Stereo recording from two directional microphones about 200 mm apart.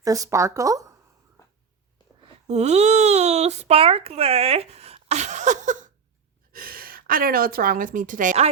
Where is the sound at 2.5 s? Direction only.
35° right (ahead or behind).